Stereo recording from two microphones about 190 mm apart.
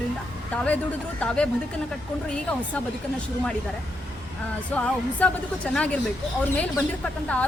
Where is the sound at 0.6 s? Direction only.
5° left (ahead or behind).